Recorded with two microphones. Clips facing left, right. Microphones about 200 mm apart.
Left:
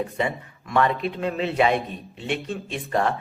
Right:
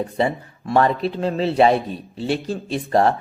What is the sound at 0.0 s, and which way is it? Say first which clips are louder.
A man's voice: right 4 dB; 35° right (ahead or behind).